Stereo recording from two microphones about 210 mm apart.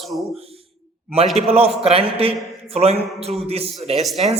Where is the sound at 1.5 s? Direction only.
30° right (ahead or behind).